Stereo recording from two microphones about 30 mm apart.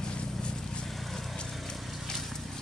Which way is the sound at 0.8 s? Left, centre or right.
Centre.